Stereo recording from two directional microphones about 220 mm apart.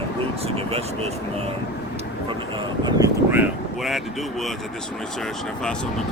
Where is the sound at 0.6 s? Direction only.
25° right (ahead or behind).